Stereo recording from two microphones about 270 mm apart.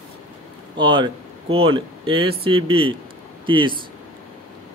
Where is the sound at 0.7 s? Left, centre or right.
Centre.